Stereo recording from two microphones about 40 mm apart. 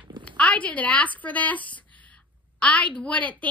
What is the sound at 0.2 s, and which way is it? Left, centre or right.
A woman's voice, left.